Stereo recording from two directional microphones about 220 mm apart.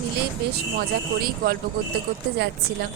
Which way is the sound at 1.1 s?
45° right (ahead or behind).